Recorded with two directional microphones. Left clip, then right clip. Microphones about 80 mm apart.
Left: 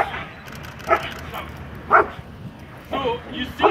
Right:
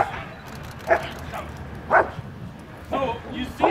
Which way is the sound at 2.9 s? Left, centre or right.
Right.